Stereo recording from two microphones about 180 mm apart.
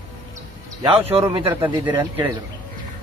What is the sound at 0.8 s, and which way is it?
Speech, 30° right (ahead or behind).